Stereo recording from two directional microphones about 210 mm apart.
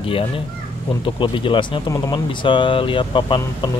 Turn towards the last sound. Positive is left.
turn(degrees=20)  # may be behind; listen again after turning